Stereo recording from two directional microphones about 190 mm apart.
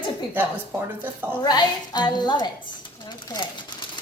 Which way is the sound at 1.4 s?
20° left (ahead or behind).